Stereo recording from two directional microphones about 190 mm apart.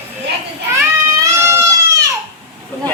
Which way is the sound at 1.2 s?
15° right (ahead or behind).